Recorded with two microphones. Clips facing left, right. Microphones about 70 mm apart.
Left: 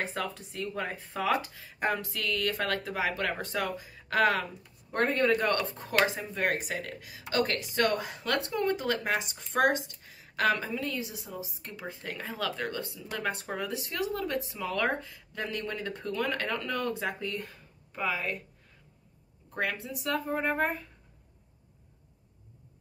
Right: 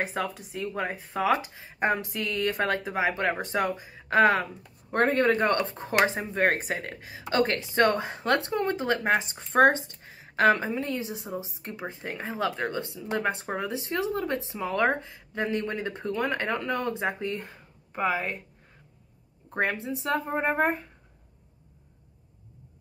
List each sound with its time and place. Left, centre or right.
0.0 s speech: centre; by 18.4 s right
19.5 s speech: right